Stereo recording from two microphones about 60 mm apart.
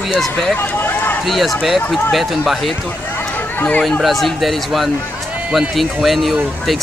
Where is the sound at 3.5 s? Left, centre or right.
Left.